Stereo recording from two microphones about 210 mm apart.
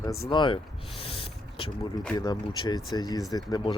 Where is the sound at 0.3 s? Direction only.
20° left (ahead or behind).